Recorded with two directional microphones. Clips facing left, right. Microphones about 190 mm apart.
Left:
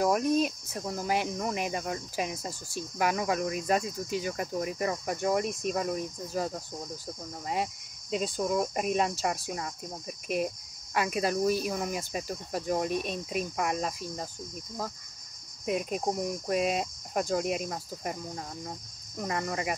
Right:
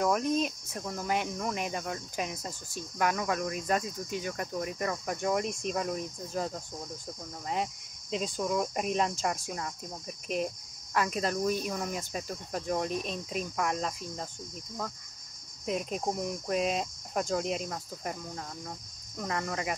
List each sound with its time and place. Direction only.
0.0 s speech: 5° left (ahead or behind)
15.6 s speech: 5° left (ahead or behind)
17.6 s speech: 15° left (ahead or behind)